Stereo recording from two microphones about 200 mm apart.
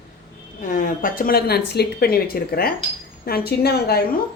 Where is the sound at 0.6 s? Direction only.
40° left (ahead or behind).